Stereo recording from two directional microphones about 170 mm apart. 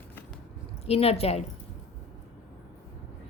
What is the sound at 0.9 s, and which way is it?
Speech, 35° left (ahead or behind).